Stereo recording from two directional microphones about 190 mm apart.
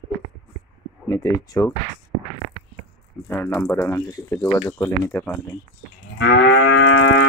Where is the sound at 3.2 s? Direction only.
10° left (ahead or behind).